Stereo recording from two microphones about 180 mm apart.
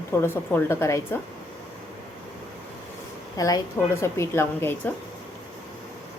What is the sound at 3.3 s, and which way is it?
A woman's voice, 20° left (ahead or behind).